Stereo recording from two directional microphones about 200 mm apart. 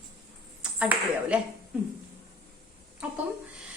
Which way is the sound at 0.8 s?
5° right (ahead or behind).